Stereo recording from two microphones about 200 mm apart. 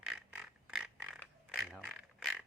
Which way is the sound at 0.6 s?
Centre (ahead or behind).